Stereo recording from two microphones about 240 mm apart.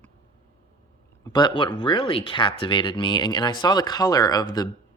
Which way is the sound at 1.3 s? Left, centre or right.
Centre.